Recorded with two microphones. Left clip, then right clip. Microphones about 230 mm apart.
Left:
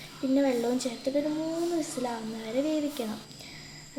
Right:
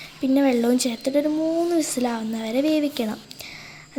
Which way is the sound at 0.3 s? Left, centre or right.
Right.